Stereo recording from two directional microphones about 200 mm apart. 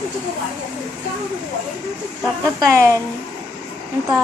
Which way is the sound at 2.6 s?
15° right (ahead or behind).